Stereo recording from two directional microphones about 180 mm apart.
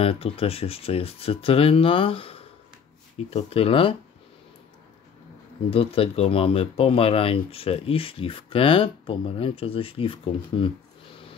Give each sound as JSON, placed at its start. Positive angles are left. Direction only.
{"t": 0.0, "sound": "speech", "side_deg": 30}
{"t": 5.7, "sound": "speech", "side_deg": 30}